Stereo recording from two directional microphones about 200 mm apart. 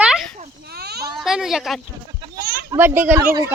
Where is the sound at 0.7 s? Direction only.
55° right (ahead or behind).